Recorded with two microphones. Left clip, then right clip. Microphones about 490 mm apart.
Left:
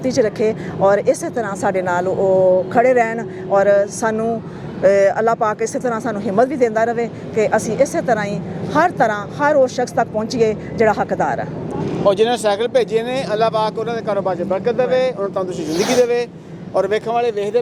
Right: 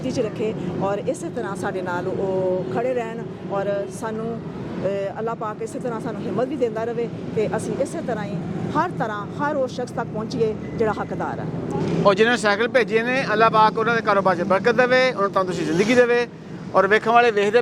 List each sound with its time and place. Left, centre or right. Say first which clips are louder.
0.1 s speech: left 8 dB; centre
12.0 s speech: left 2 dB; right